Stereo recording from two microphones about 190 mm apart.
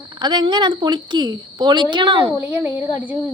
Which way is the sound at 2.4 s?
10° right (ahead or behind).